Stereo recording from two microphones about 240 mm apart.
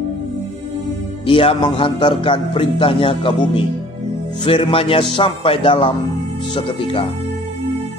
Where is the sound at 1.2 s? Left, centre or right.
Left.